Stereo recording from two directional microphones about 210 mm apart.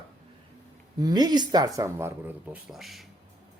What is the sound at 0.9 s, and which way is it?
Speech, 20° right (ahead or behind).